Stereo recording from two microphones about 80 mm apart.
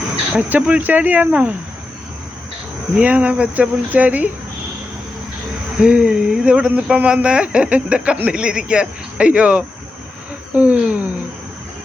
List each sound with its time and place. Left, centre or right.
0.3 s speech: centre
2.9 s speech: centre
5.8 s speech: centre
10.5 s a sound: centre